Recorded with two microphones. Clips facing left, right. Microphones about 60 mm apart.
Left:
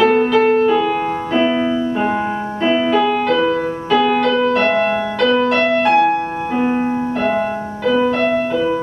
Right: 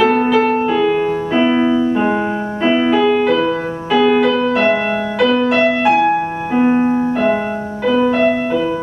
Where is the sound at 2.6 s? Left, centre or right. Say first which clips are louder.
Right 2 dB; centre.